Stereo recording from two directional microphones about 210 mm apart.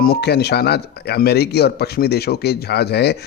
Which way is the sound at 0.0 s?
50° left (ahead or behind).